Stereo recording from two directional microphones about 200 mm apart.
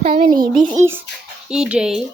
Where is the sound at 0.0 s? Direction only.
30° right (ahead or behind).